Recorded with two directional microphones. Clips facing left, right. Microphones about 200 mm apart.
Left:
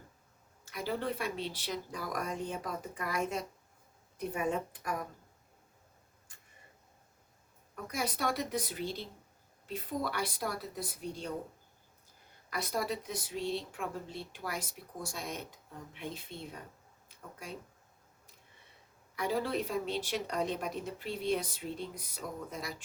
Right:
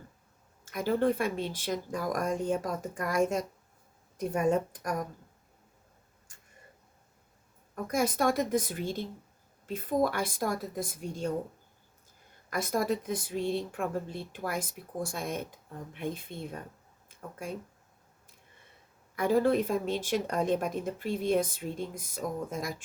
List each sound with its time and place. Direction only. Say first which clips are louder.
0.6 s a woman's voice: right 8 dB; 50° right (ahead or behind)
7.9 s a woman's voice: right 7 dB; 50° right (ahead or behind)
12.5 s a woman's voice: right 6 dB; 50° right (ahead or behind)
19.1 s a woman's voice: right 8 dB; 50° right (ahead or behind)